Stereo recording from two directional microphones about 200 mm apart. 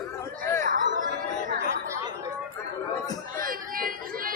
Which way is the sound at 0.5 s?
45° right (ahead or behind).